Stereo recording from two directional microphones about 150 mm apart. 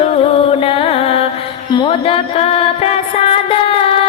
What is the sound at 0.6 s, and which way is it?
Carnatic music, 40° left (ahead or behind).